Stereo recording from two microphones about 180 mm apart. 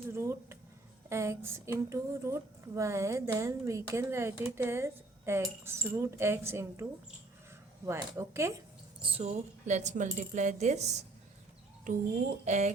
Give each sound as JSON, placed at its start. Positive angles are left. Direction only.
{"t": 0.1, "sound": "a sound", "side_deg": -15}
{"t": 1.1, "sound": "speech", "side_deg": -15}
{"t": 7.9, "sound": "speech", "side_deg": -15}
{"t": 9.0, "sound": "speech", "side_deg": -30}
{"t": 12.5, "sound": "speech", "side_deg": -40}